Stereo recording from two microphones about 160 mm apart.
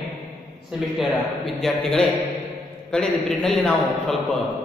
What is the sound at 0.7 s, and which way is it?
A man's voice, centre (ahead or behind).